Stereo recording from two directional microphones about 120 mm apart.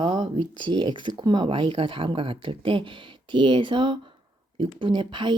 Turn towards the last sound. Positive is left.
turn(degrees=-40)  # may be behind; listen again after turning